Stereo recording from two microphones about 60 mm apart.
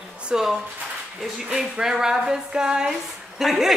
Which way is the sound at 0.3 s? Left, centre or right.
Centre.